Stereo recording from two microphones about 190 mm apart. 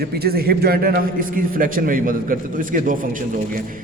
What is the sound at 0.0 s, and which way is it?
A man's voice, 55° right (ahead or behind).